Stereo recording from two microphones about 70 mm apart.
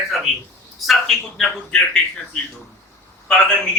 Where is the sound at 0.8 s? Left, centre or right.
Centre.